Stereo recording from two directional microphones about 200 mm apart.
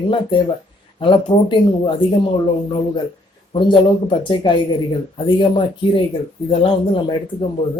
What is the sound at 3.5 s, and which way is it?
Speech, 25° left (ahead or behind).